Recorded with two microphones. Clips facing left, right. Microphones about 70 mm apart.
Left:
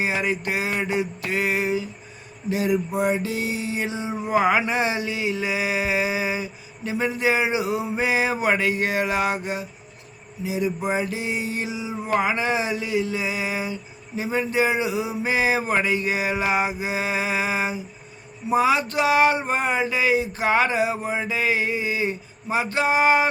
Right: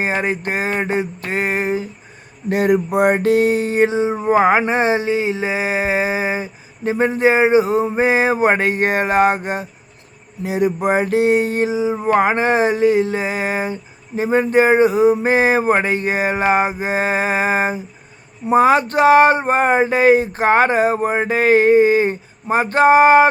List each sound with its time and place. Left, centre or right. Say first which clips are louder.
0.0 s music: right 4 dB; right
2.5 s music: right 7 dB; right
10.4 s speech: right 7 dB; right